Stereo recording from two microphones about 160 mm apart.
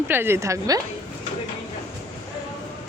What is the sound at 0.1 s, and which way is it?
Speech, 15° right (ahead or behind).